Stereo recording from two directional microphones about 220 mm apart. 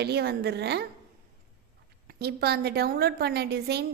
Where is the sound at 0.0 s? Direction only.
50° right (ahead or behind).